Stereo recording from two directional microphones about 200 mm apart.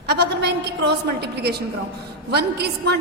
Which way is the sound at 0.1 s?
55° right (ahead or behind).